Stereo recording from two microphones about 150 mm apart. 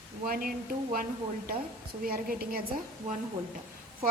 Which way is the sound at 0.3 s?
75° right (ahead or behind).